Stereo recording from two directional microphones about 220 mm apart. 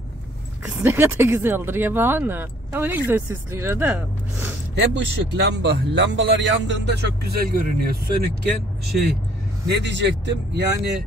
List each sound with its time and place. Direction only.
0.7 s speech: 10° right (ahead or behind)
4.7 s speech: 55° right (ahead or behind)
9.7 s speech: 50° right (ahead or behind)